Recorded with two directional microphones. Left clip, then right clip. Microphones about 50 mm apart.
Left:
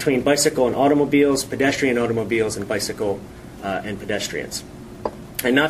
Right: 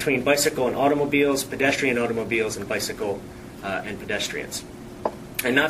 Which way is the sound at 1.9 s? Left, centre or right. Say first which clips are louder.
Left 3 dB; centre.